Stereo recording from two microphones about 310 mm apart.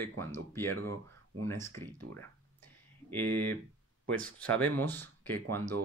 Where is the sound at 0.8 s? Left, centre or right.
Right.